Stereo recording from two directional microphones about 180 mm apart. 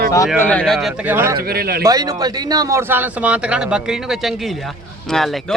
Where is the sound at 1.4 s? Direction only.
60° right (ahead or behind).